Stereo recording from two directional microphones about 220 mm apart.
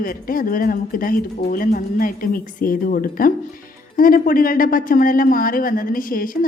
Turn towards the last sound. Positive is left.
turn(degrees=40)  # may be behind; listen again after turning